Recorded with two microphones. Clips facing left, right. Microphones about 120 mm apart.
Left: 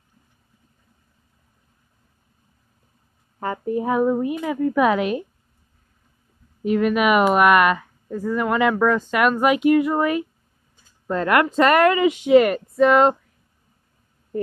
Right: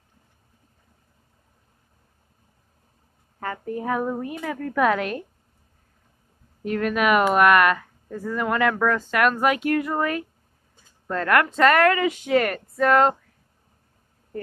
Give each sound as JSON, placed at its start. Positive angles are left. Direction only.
{"t": 3.3, "sound": "speech", "side_deg": 20}
{"t": 6.6, "sound": "speech", "side_deg": 10}